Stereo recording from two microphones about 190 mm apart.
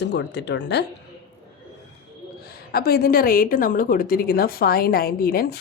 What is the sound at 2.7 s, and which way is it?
A woman's voice, 55° left (ahead or behind).